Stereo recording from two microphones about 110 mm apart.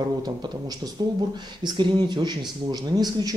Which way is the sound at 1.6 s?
45° right (ahead or behind).